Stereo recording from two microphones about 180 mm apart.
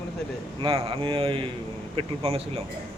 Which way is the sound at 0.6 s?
30° right (ahead or behind).